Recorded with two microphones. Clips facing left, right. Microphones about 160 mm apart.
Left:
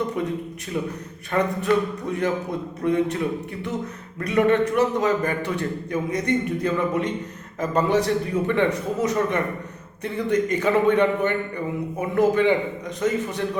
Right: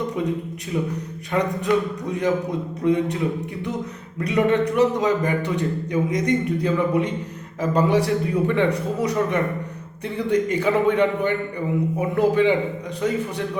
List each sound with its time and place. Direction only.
1.3 s a man's voice: 15° right (ahead or behind)
4.2 s a man's voice: 15° right (ahead or behind)